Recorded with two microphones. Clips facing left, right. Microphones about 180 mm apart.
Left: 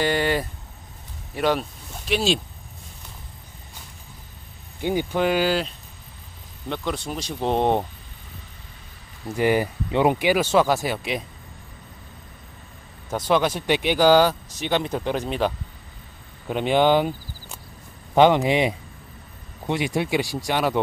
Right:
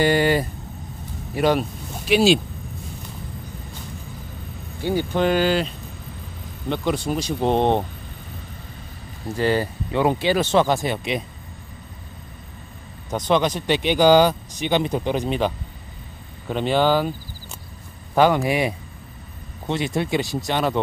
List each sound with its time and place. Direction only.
0.0 s speech: 5° right (ahead or behind)
4.8 s speech: 10° left (ahead or behind)
6.7 s speech: 5° right (ahead or behind)
9.4 s speech: 15° left (ahead or behind)
13.1 s speech: 5° left (ahead or behind)
16.4 s speech: 10° left (ahead or behind)
18.1 s speech: 20° left (ahead or behind)